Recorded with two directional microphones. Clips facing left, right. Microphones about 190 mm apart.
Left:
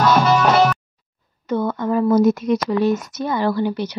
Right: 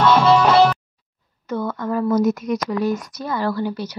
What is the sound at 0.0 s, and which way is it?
Music, 30° right (ahead or behind).